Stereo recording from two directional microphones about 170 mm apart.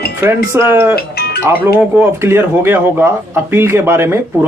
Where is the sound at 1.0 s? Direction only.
65° left (ahead or behind).